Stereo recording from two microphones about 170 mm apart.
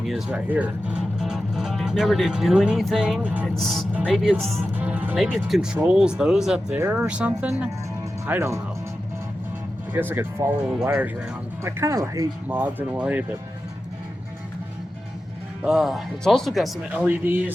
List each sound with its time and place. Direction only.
0.0 s speech: 5° right (ahead or behind)
9.9 s speech: 10° right (ahead or behind)
12.5 s speech: 10° right (ahead or behind)
15.6 s speech: centre (ahead or behind)